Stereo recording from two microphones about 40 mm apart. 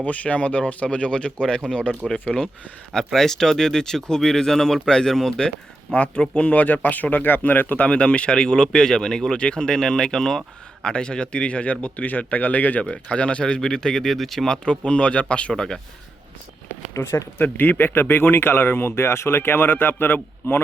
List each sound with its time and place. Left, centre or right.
0.0 s speech: left; by 5.5 s centre
5.9 s speech: left
7.8 s speech: left; by 10.4 s centre
10.8 s speech: left
12.9 s speech: left; by 14.4 s centre
14.4 s speech: left
15.5 s speech: centre
16.6 s a sound: left
17.3 s speech: left